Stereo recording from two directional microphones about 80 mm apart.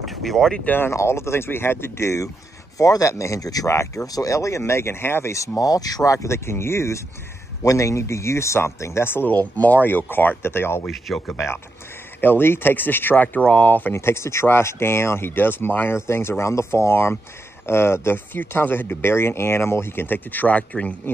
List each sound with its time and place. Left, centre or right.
0.0 s speech: centre
0.7 s speech: left
5.6 s speech: left; by 20.9 s centre